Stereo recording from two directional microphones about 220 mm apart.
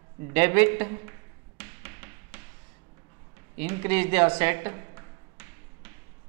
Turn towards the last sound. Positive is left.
turn(degrees=-15)  # may be behind; listen again after turning